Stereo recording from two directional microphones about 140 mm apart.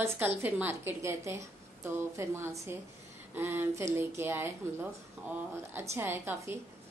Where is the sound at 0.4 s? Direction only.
15° right (ahead or behind).